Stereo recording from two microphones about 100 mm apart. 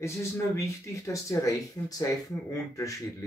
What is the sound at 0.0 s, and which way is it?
Speech, 30° left (ahead or behind).